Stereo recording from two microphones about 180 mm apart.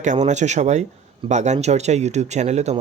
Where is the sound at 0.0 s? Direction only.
40° right (ahead or behind).